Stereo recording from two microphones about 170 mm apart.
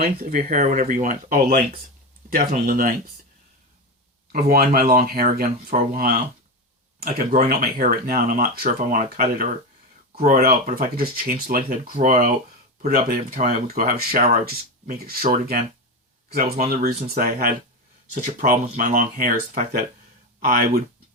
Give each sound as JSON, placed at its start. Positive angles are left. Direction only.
{"t": 0.0, "sound": "speech", "side_deg": -55}
{"t": 4.3, "sound": "speech", "side_deg": -60}
{"t": 7.0, "sound": "speech", "side_deg": -60}